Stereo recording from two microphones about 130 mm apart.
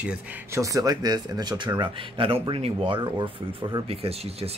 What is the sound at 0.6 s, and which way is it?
Speech, 25° right (ahead or behind).